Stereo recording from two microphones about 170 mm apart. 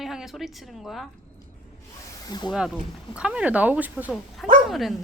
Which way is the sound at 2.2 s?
25° left (ahead or behind).